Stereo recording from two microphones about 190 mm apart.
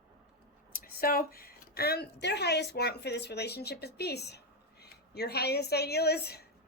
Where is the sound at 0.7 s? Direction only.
50° left (ahead or behind).